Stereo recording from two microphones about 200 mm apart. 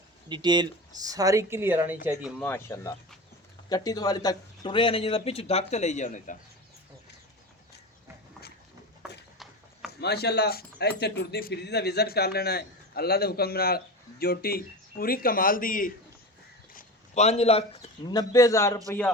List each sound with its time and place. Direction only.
0.3 s speech: 20° right (ahead or behind)
2.4 s a man's voice: 10° left (ahead or behind); by 6.3 s 40° left (ahead or behind)
10.0 s speech: 55° left (ahead or behind)
16.7 s a sound: 35° left (ahead or behind)
18.1 s a man's voice: 20° left (ahead or behind)